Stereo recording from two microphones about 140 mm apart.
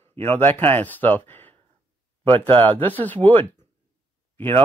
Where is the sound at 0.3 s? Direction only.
15° left (ahead or behind).